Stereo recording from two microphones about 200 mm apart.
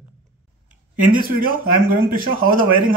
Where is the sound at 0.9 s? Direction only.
45° right (ahead or behind).